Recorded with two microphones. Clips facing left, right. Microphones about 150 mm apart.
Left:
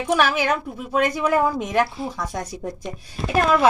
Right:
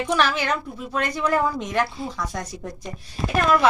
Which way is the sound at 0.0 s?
10° left (ahead or behind).